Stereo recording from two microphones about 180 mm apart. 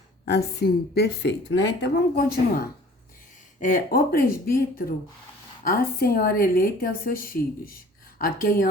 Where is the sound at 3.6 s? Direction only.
50° left (ahead or behind).